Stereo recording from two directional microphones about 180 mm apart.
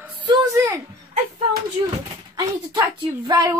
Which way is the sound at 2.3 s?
20° right (ahead or behind).